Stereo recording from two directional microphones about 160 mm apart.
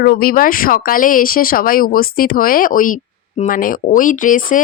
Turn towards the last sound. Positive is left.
turn(degrees=55)  # may be behind; listen again after turning